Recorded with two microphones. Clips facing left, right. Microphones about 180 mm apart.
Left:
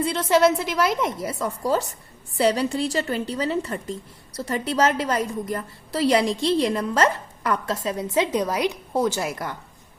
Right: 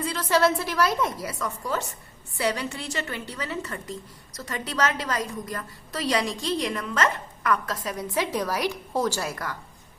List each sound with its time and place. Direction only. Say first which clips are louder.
0.0 s a woman's voice: left 4 dB; 25° left (ahead or behind)